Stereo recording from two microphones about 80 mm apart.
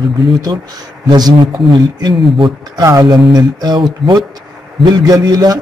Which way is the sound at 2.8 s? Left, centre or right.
Right.